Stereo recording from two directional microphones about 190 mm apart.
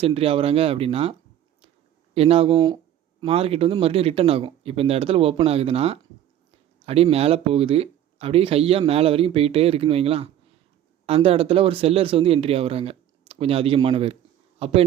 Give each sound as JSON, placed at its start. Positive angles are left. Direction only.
{"t": 0.0, "sound": "speech", "side_deg": -30}
{"t": 2.1, "sound": "a man's voice", "side_deg": -30}